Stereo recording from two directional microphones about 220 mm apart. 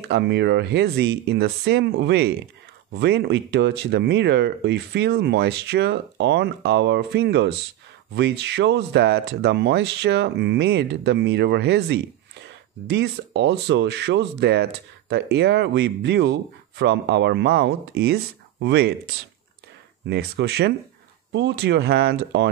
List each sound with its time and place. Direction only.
0.1 s speech: 50° right (ahead or behind)
20.1 s speech: 50° right (ahead or behind)